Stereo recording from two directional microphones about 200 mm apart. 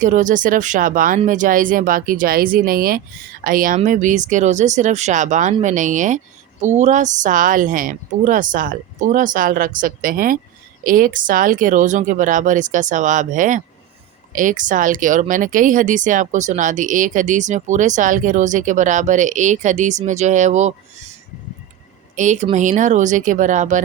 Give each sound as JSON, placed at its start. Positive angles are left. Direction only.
{"t": 0.0, "sound": "speech", "side_deg": -40}
{"t": 22.1, "sound": "a woman's voice", "side_deg": -35}